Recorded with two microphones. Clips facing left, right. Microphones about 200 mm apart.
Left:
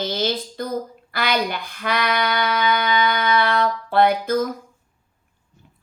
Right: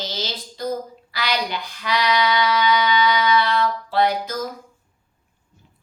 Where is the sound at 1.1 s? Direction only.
55° left (ahead or behind).